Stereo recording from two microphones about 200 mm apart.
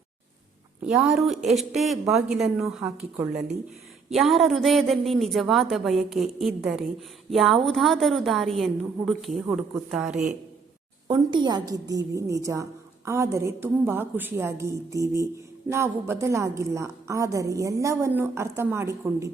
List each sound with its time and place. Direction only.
1.0 s a woman's voice: centre (ahead or behind)
4.1 s a woman's voice: centre (ahead or behind)
11.1 s a woman's voice: 20° right (ahead or behind)